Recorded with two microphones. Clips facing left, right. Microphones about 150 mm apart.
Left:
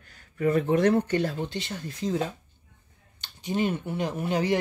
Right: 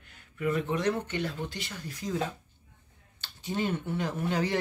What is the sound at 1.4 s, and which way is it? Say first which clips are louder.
Speech: left 5 dB; 25° left (ahead or behind).